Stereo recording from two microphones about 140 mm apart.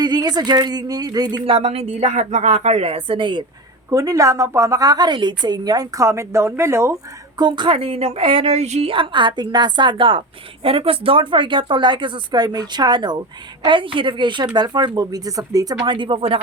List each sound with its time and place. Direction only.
0.0 s speech: 30° right (ahead or behind)
1.5 s a woman's voice: 45° right (ahead or behind)
3.8 s a woman's voice: 25° right (ahead or behind)
7.3 s a woman's voice: 30° right (ahead or behind)